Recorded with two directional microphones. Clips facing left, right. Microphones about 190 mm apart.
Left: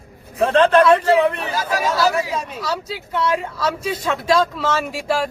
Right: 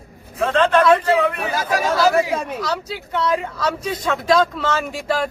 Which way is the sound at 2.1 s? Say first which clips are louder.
Right 4 dB; 60° right (ahead or behind).